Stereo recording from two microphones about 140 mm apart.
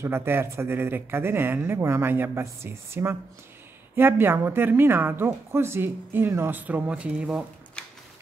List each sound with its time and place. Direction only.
0.0 s a woman's voice: 15° right (ahead or behind)